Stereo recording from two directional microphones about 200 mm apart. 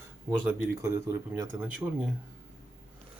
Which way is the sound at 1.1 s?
15° right (ahead or behind).